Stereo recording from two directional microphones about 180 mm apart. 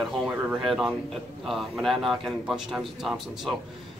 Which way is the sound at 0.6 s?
Centre (ahead or behind).